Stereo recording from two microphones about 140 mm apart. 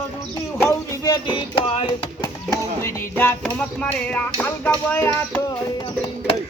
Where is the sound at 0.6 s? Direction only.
20° left (ahead or behind).